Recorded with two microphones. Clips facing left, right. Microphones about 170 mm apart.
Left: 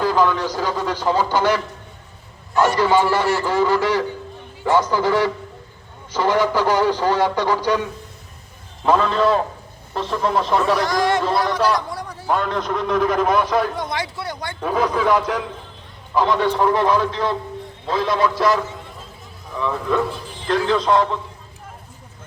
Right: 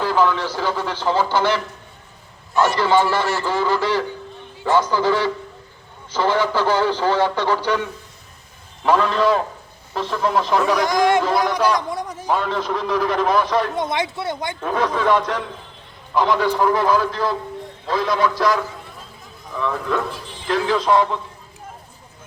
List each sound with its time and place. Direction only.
0.2 s a man's voice: 15° left (ahead or behind)
8.8 s a man's voice: centre (ahead or behind)
10.8 s a man's voice: 15° right (ahead or behind)
11.9 s a sound: 20° right (ahead or behind)
12.3 s a man's voice: centre (ahead or behind)
13.7 s speech: 20° right (ahead or behind)
14.6 s a man's voice: 5° left (ahead or behind)